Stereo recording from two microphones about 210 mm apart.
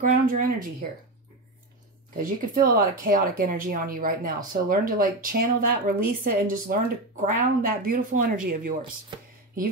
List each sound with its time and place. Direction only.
0.0 s speech: 40° right (ahead or behind)
2.1 s speech: 40° right (ahead or behind)